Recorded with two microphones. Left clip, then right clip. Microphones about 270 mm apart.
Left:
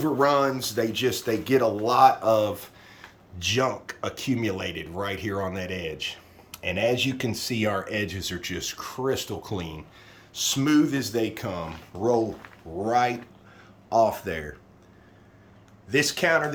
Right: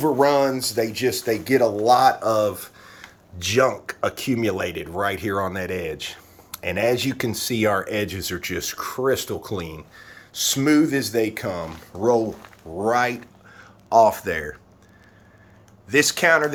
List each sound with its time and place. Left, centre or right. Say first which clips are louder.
0.0 s speech: right 4 dB; centre
15.9 s speech: right 5 dB; centre